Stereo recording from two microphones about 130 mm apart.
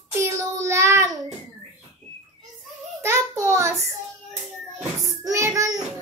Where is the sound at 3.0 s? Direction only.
20° right (ahead or behind).